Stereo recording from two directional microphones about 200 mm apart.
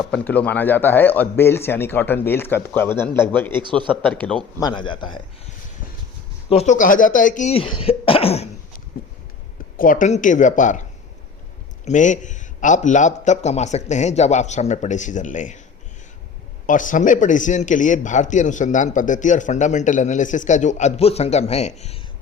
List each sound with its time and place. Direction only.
0.1 s a man's voice: 5° left (ahead or behind)
3.6 s a man's voice: 25° right (ahead or behind)
4.0 s a man's voice: 5° left (ahead or behind)
4.6 s speech: 25° left (ahead or behind)
6.5 s a man's voice: 35° left (ahead or behind)
9.7 s a man's voice: 45° left (ahead or behind)
11.9 s a man's voice: 40° left (ahead or behind)
16.6 s a man's voice: 40° left (ahead or behind)